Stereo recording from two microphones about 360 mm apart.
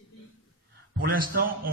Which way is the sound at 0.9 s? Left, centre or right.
Right.